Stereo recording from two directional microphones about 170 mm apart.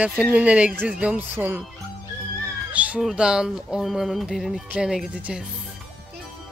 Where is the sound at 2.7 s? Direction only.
5° right (ahead or behind).